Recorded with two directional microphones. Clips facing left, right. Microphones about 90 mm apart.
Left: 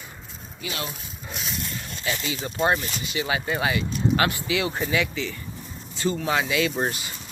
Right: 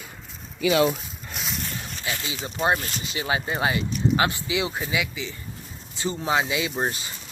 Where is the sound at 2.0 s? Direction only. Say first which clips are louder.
Left 3 dB; 20° right (ahead or behind).